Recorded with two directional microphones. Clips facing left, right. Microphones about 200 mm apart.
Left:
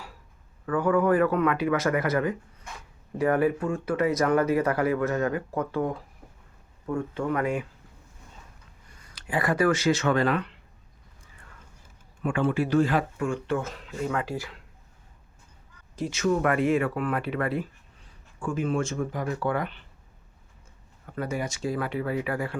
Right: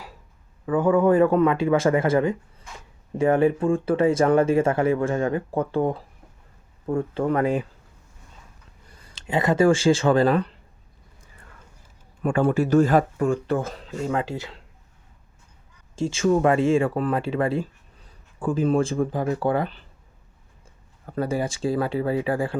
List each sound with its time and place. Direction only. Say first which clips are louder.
0.6 s speech: right 4 dB; 20° right (ahead or behind)
9.0 s speech: right 4 dB; 30° right (ahead or behind)
12.2 s speech: right 4 dB; 40° right (ahead or behind); by 14.6 s 25° right (ahead or behind)
16.0 s speech: right 5 dB; 30° right (ahead or behind)
21.2 s speech: right 5 dB; 30° right (ahead or behind)